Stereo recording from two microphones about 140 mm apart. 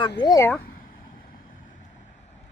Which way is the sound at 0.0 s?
35° left (ahead or behind).